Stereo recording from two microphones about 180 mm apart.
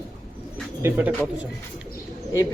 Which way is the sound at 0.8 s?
10° right (ahead or behind).